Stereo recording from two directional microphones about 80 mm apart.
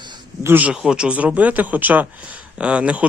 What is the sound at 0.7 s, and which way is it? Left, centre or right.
Speech, centre.